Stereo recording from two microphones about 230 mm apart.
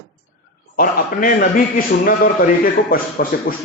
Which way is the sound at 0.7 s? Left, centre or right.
Left.